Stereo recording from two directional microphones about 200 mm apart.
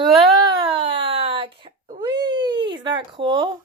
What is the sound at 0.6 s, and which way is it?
Baby cry, 25° right (ahead or behind).